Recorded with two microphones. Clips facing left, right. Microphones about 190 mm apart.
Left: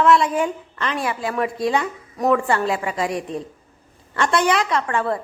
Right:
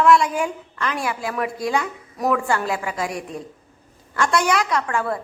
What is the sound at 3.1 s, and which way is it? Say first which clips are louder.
A woman's voice: left 4 dB; 30° left (ahead or behind).